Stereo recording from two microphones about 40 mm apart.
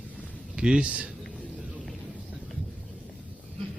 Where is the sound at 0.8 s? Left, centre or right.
Right.